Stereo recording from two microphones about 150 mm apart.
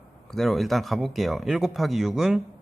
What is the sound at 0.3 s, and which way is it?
Speech, centre (ahead or behind).